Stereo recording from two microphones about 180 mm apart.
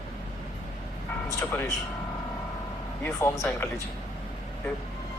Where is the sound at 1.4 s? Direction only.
15° left (ahead or behind).